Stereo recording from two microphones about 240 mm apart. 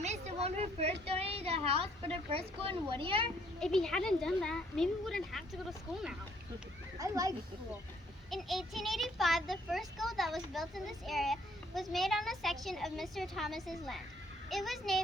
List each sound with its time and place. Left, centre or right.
0.0 s a sound: right
1.0 s a woman's voice: right
3.6 s a child's voice: centre
7.0 s a child's voice: centre
8.3 s a child's voice: centre